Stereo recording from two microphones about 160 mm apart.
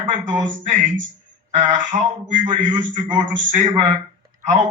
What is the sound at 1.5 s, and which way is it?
A man's voice, 50° right (ahead or behind).